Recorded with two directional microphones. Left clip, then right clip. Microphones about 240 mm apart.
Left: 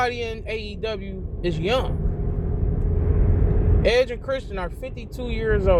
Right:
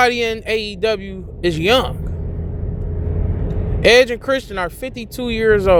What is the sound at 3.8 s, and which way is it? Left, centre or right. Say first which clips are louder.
A man's voice: right 9 dB; right.